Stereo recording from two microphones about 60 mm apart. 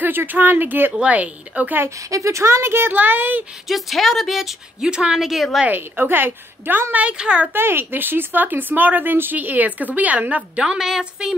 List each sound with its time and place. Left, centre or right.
0.0 s a woman's voice: right
0.9 s speech: right
2.0 s speech: right
2.9 s a woman's voice: right
3.6 s speech: centre
4.8 s a woman's voice: centre
5.7 s a woman's voice: right; by 7.4 s centre
7.5 s a woman's voice: right; by 11.3 s centre